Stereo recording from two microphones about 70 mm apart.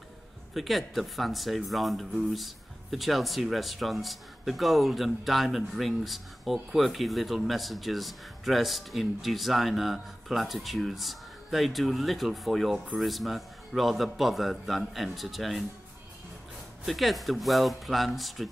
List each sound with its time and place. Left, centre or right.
0.6 s speech: centre
16.8 s speech: centre